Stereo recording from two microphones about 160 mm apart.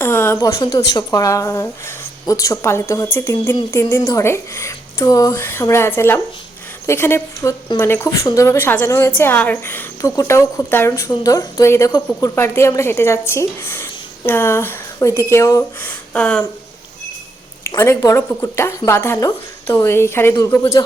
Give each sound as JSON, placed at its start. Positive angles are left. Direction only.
{"t": 0.0, "sound": "a woman's voice", "side_deg": 15}
{"t": 15.8, "sound": "a sound", "side_deg": 10}
{"t": 17.7, "sound": "a woman's voice", "side_deg": 15}